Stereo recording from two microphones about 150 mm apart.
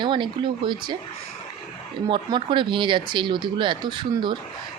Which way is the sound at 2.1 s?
35° right (ahead or behind).